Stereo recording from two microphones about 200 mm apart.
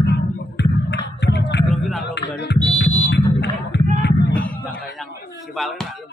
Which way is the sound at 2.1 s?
60° left (ahead or behind).